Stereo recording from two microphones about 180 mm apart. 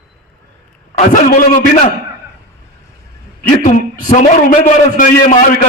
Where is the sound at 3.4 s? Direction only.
45° left (ahead or behind).